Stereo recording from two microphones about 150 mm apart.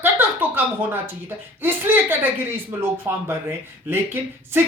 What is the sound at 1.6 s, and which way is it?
Speech, 15° right (ahead or behind).